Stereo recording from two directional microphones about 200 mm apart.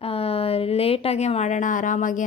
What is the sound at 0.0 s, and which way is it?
Speech, 30° left (ahead or behind).